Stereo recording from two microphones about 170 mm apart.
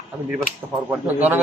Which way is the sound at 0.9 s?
10° right (ahead or behind).